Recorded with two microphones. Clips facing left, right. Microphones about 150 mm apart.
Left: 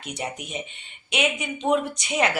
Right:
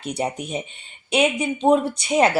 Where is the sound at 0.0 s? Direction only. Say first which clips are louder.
Right 7 dB; 35° right (ahead or behind).